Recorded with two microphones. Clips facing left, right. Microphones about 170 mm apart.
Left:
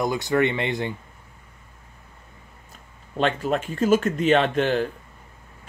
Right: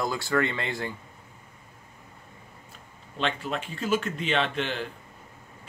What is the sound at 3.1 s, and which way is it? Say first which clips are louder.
Speech: left 7 dB; 45° left (ahead or behind).